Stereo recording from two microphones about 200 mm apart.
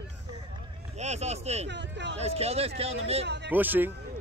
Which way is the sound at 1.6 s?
60° right (ahead or behind).